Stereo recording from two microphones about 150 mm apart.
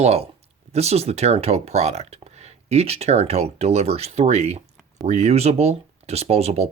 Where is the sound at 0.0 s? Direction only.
45° right (ahead or behind).